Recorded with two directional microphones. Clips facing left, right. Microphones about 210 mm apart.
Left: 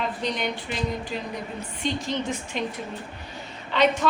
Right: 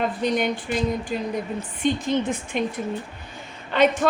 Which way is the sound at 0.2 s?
50° right (ahead or behind).